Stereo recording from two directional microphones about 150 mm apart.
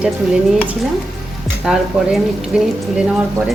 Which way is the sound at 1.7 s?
Centre (ahead or behind).